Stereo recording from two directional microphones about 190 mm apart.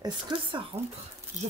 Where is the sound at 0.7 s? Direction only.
35° right (ahead or behind).